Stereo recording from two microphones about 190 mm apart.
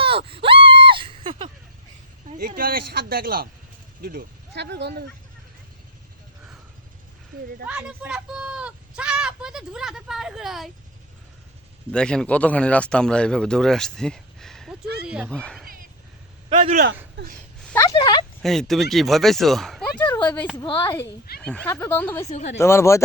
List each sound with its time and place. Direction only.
0.0 s a sound: 30° right (ahead or behind)
2.6 s speech: 50° right (ahead or behind)
7.3 s speech: 50° right (ahead or behind)
7.7 s speech: 5° right (ahead or behind)
11.9 s speech: 5° left (ahead or behind)
15.4 s speech: 5° left (ahead or behind)
15.6 s a sound: 50° right (ahead or behind)
16.5 s a man's voice: 40° right (ahead or behind)
17.7 s a woman's voice: 20° left (ahead or behind)
18.4 s speech: centre (ahead or behind)
20.1 s a sound: 25° left (ahead or behind)
20.6 s a woman's voice: 20° left (ahead or behind)
21.4 s speech: 5° left (ahead or behind)